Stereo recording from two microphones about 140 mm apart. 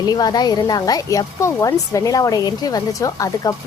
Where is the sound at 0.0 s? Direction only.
30° left (ahead or behind).